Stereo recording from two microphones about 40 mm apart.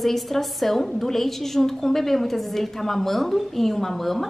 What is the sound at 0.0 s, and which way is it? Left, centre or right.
A woman's voice, centre.